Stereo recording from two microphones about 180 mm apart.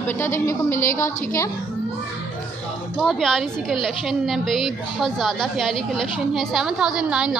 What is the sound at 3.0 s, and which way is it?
A woman's voice, centre (ahead or behind).